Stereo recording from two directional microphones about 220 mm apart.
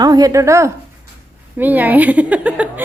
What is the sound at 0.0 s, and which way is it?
A woman's voice, 15° right (ahead or behind).